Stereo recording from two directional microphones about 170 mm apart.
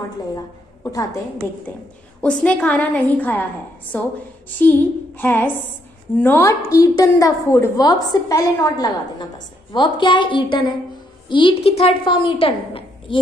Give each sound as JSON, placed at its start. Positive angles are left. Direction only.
{"t": 2.2, "sound": "a woman's voice", "side_deg": 5}
{"t": 4.6, "sound": "a woman's voice", "side_deg": 10}